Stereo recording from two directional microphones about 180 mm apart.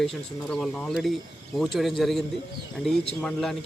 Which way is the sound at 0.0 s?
5° left (ahead or behind).